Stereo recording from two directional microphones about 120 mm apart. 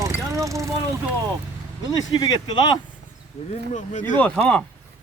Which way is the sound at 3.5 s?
90° left.